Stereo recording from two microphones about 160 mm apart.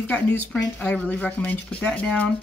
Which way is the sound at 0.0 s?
10° left (ahead or behind).